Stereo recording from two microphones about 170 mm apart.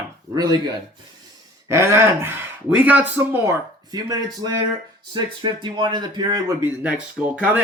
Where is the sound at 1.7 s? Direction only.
15° right (ahead or behind).